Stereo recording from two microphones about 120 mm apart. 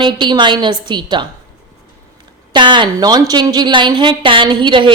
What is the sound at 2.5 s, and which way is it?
A woman's voice, 40° right (ahead or behind).